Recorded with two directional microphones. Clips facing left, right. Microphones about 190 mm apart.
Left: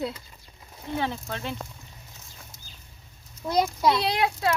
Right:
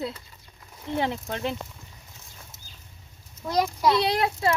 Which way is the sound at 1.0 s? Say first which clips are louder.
Right 4 dB; 20° right (ahead or behind).